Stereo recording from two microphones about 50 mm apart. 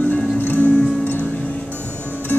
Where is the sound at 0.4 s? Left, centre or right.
Left.